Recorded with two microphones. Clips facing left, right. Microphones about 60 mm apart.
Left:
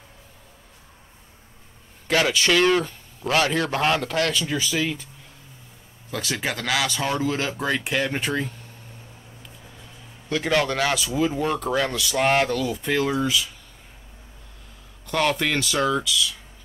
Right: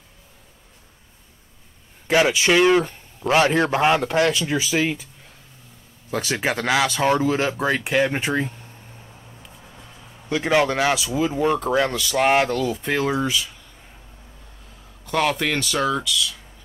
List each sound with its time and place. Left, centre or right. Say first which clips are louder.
2.0 s a man's voice: right 3 dB; centre
6.0 s speech: right 4 dB; centre
6.3 s a man's voice: right 4 dB; right
7.2 s speech: right 4 dB; centre
10.3 s speech: right 3 dB; centre
11.1 s speech: right 3 dB; centre
15.0 s speech: right 1 dB; centre